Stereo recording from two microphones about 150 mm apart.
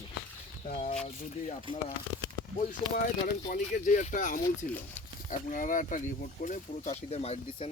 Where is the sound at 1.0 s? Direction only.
55° left (ahead or behind).